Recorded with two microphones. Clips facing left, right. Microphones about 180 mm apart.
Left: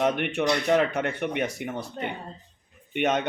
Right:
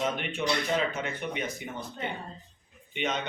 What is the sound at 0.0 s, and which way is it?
A man's voice, 65° left (ahead or behind).